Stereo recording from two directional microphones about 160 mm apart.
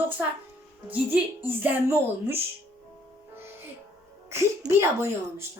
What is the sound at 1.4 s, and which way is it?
Music, 10° right (ahead or behind).